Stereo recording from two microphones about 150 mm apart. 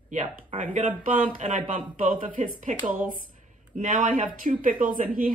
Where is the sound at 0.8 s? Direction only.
60° right (ahead or behind).